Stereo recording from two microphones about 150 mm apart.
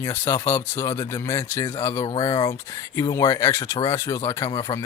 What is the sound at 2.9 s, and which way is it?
Speech, 20° left (ahead or behind).